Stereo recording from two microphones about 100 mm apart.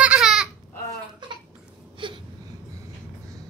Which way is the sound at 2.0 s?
55° right (ahead or behind).